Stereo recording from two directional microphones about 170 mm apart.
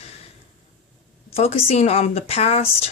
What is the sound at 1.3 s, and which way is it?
A woman's voice, 40° left (ahead or behind).